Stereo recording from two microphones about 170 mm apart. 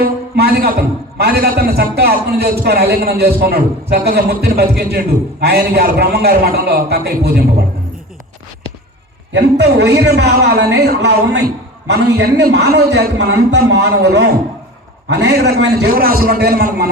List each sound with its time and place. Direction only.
0.0 s a man's voice: 65° right (ahead or behind)
9.3 s a man's voice: 80° right